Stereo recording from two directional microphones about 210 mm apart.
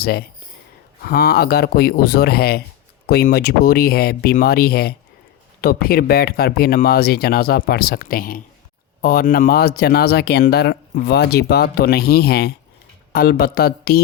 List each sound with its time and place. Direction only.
0.0 s speech: 50° left (ahead or behind)